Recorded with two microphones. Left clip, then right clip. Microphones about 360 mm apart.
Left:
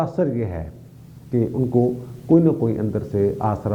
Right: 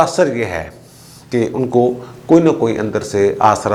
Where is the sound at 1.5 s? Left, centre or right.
Centre.